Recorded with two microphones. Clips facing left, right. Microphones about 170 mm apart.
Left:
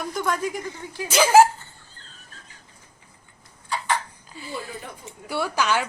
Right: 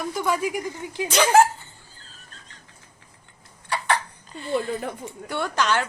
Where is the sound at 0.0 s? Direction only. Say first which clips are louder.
Right 1 dB; 5° right (ahead or behind).